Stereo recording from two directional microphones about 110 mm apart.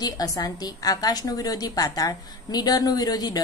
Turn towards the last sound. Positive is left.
turn(degrees=35)  # may be behind; listen again after turning